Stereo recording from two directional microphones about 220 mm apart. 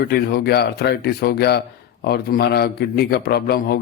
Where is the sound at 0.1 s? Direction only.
45° left (ahead or behind).